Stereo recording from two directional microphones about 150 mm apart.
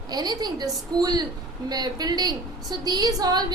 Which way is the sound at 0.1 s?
25° right (ahead or behind).